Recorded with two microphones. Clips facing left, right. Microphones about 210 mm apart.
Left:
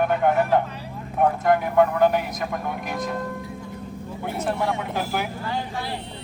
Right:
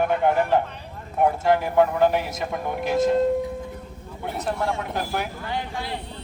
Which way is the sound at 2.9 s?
25° right (ahead or behind).